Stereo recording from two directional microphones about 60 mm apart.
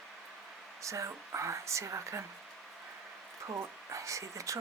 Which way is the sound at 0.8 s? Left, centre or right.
Right.